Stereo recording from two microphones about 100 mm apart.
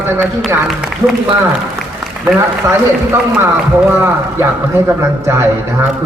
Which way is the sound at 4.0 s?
25° right (ahead or behind).